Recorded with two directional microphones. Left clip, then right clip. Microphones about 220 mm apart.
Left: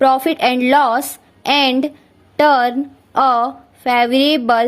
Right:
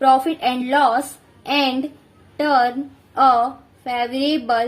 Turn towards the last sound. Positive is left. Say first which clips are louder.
# left 6 dB
turn(degrees=40)  # may be behind; listen again after turning